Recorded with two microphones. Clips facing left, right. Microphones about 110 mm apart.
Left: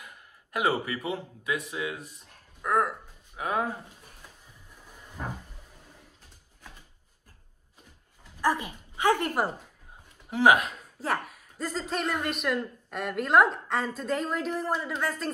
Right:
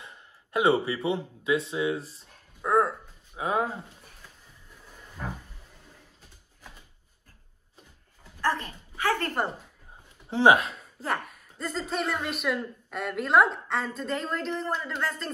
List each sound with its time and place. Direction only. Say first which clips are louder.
0.0 s speech: right 1 dB; 25° right (ahead or behind)
5.2 s a sound: even; 10° left (ahead or behind)
8.4 s speech: left 1 dB; 10° left (ahead or behind)
10.3 s speech: right 1 dB; 30° right (ahead or behind)
11.0 s a woman's voice: left 1 dB; centre (ahead or behind)